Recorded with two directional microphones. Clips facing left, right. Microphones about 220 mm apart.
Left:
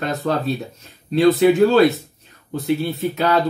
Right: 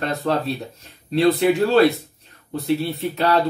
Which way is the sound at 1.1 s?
Centre (ahead or behind).